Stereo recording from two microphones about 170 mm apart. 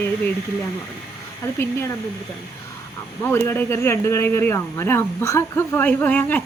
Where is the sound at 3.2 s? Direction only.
15° left (ahead or behind).